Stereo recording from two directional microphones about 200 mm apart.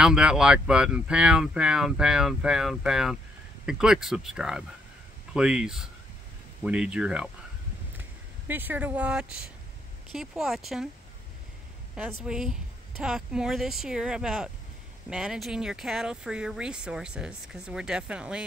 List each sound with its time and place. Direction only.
0.0 s speech: 5° right (ahead or behind)
11.9 s speech: 5° right (ahead or behind)